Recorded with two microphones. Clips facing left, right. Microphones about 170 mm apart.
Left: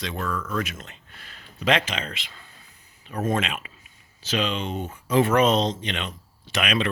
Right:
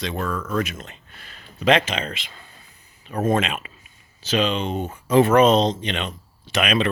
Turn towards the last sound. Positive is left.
turn(degrees=-30)  # may be behind; listen again after turning